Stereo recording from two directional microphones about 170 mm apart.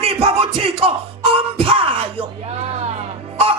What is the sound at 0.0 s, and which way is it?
Music, 35° right (ahead or behind).